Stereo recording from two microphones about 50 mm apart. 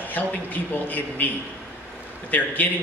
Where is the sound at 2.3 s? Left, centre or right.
Left.